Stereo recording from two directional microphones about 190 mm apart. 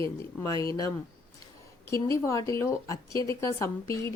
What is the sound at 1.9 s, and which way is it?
A woman's voice, 15° left (ahead or behind).